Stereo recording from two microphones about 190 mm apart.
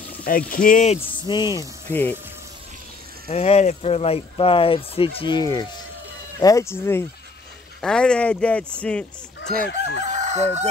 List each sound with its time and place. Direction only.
0.5 s speech: 45° left (ahead or behind)
1.2 s speech: 20° left (ahead or behind)
3.3 s speech: 35° left (ahead or behind); by 9.0 s 5° left (ahead or behind)
9.7 s chicken: 65° left (ahead or behind)
10.0 s chicken: 40° right (ahead or behind)